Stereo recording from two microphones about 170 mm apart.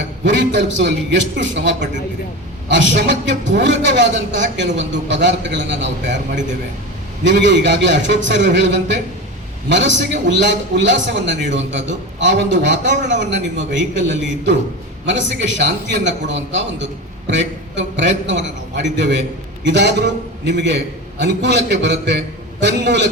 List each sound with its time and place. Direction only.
0.3 s a man's voice: 90° right
7.3 s a man's voice: 90° right
12.8 s a man's voice: 45° right (ahead or behind)
13.7 s a man's voice: 90° right